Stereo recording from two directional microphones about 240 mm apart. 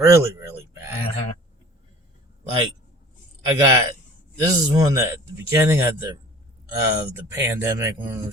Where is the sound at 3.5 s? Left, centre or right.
Centre.